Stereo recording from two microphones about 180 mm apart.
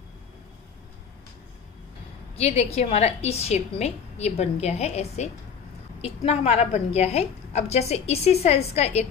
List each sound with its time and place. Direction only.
2.3 s a woman's voice: 35° left (ahead or behind)